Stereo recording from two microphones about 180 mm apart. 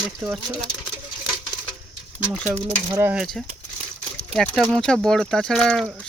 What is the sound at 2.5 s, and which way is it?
Speech, 15° right (ahead or behind).